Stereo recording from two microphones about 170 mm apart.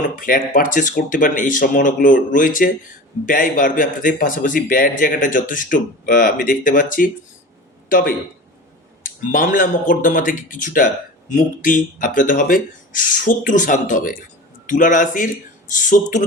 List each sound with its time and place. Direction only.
0.2 s speech: 50° left (ahead or behind)